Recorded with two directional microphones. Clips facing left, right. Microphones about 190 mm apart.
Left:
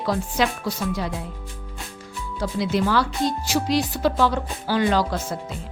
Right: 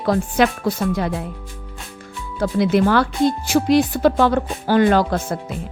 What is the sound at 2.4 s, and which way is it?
Speech, 55° right (ahead or behind).